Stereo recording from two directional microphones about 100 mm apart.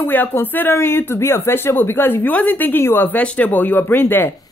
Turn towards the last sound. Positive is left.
turn(degrees=20)  # may be behind; listen again after turning